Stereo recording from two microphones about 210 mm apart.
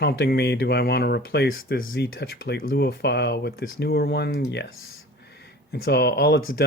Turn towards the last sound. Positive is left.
turn(degrees=50)  # may be behind; listen again after turning